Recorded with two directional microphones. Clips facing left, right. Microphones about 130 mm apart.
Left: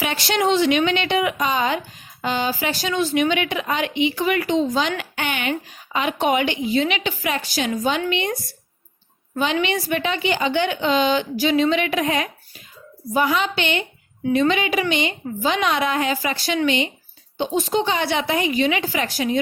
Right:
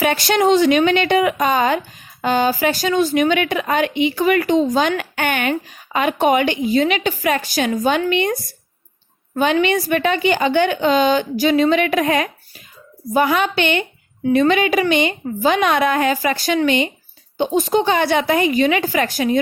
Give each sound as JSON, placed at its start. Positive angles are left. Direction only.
{"t": 0.0, "sound": "a woman's voice", "side_deg": -50}